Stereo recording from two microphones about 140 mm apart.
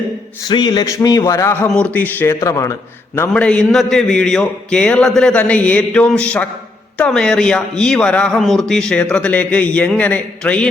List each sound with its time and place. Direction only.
0.4 s a man's voice: 30° left (ahead or behind)
1.7 s a man's voice: 10° left (ahead or behind)
3.2 s a man's voice: 10° left (ahead or behind)